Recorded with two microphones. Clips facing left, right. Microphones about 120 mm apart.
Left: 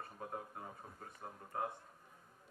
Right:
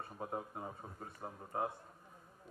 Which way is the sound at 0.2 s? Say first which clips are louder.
Right 5 dB; 25° right (ahead or behind).